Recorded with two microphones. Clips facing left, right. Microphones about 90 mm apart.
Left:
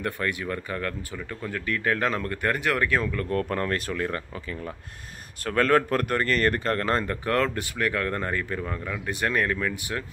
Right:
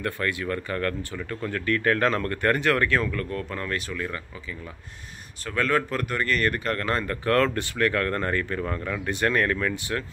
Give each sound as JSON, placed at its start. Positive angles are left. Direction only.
{"t": 0.0, "sound": "speech", "side_deg": 20}
{"t": 3.3, "sound": "speech", "side_deg": 45}